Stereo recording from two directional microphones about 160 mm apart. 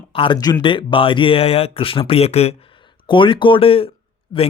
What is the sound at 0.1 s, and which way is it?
Speech, 30° left (ahead or behind).